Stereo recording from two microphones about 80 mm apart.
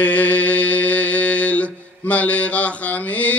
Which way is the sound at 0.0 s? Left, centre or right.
Centre.